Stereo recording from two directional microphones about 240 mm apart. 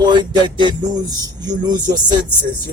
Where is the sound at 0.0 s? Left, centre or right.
Centre.